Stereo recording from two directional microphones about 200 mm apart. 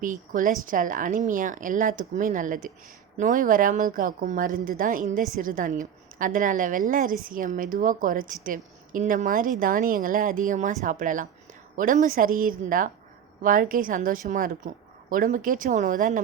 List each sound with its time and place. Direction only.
0.0 s a woman's voice: 40° right (ahead or behind)